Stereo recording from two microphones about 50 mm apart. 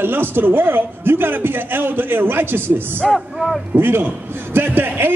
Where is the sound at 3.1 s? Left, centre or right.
Centre.